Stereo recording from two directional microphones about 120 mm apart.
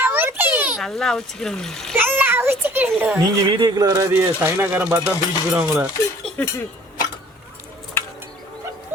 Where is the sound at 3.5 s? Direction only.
35° right (ahead or behind).